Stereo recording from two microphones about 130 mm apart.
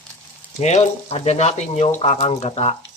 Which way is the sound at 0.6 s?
55° left (ahead or behind).